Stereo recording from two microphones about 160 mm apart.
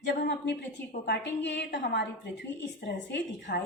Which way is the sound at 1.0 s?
90° left.